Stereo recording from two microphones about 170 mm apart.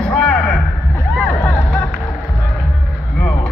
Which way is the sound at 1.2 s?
10° left (ahead or behind).